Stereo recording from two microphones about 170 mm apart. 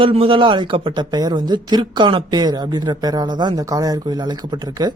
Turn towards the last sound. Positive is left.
turn(degrees=-25)  # may be behind; listen again after turning